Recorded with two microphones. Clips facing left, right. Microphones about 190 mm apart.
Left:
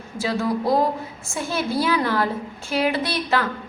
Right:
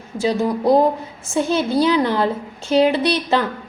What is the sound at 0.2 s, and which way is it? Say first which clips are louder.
A woman's voice: right 4 dB; 20° right (ahead or behind).